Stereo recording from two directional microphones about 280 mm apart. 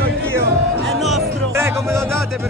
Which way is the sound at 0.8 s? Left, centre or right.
Centre.